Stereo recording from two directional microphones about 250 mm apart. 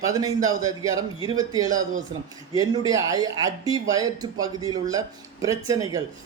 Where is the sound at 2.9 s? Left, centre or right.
Centre.